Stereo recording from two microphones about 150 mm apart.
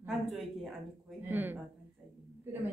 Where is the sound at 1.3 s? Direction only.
15° right (ahead or behind).